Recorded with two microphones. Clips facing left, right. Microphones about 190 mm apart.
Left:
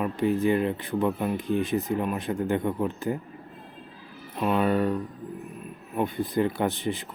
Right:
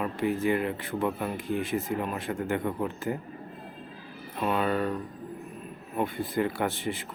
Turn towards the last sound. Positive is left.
turn(degrees=20)  # may be behind; listen again after turning